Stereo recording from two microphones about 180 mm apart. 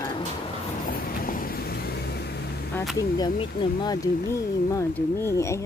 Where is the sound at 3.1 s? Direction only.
25° left (ahead or behind).